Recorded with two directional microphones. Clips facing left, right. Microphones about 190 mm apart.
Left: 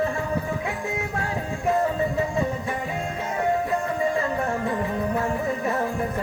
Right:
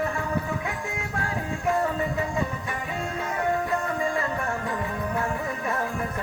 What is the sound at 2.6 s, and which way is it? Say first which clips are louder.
Music: left 3 dB; 25° left (ahead or behind).